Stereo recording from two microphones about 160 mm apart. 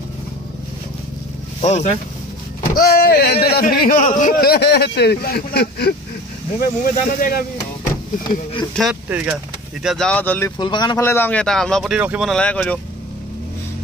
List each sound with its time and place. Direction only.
1.6 s speech: 45° left (ahead or behind)
2.7 s speech: 70° left (ahead or behind); by 5.9 s 85° left
6.6 s speech: 65° left (ahead or behind)
9.1 s speech: 10° right (ahead or behind)
9.8 s speech: 5° left (ahead or behind)
10.6 s speech: 30° left (ahead or behind)
11.0 s speech: 15° left (ahead or behind); by 12.3 s 5° right (ahead or behind)
12.3 s speech: 5° left (ahead or behind)